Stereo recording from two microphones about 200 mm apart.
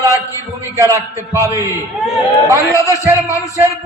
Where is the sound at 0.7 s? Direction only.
15° right (ahead or behind).